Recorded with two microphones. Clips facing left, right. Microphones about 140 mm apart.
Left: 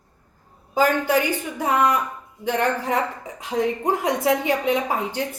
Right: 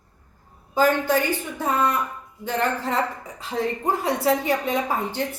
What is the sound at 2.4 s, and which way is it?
A woman's voice, 15° left (ahead or behind).